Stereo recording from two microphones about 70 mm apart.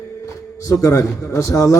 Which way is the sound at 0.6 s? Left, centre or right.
Left.